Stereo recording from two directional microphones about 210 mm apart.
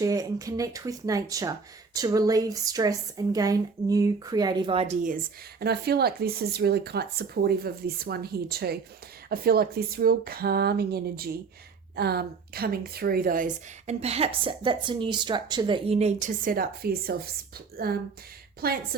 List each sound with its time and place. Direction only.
0.0 s a woman's voice: 15° right (ahead or behind); by 17.9 s 45° right (ahead or behind)